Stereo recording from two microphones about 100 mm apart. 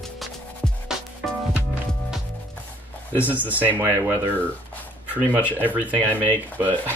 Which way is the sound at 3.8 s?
25° right (ahead or behind).